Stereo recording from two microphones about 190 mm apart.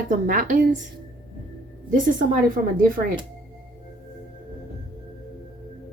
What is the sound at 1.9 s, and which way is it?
A woman's voice, 45° right (ahead or behind).